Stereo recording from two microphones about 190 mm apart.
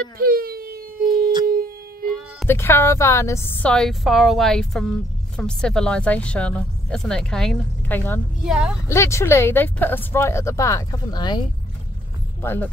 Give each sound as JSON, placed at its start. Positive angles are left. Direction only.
{"t": 0.2, "sound": "wail", "side_deg": -50}
{"t": 1.4, "sound": "shofar", "side_deg": -50}
{"t": 2.4, "sound": "speech", "side_deg": 15}
{"t": 8.5, "sound": "speech", "side_deg": -5}
{"t": 8.8, "sound": "speech", "side_deg": 15}
{"t": 12.4, "sound": "speech", "side_deg": 10}